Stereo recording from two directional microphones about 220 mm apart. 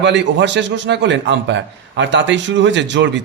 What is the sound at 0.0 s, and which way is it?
Speech, 55° right (ahead or behind).